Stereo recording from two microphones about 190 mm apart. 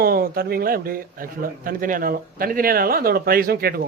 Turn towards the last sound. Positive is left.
turn(degrees=-55)  # may be behind; listen again after turning